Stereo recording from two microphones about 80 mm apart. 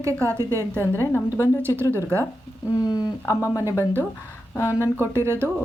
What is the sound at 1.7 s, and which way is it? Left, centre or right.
Speech, left.